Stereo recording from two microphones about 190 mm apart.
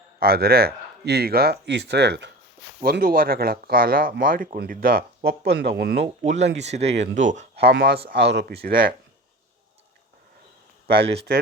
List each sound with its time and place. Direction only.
0.2 s speech: 55° right (ahead or behind)
2.8 s speech: 50° right (ahead or behind)
6.2 s speech: 40° right (ahead or behind)
7.5 s speech: 60° right (ahead or behind)
11.0 s speech: 30° right (ahead or behind)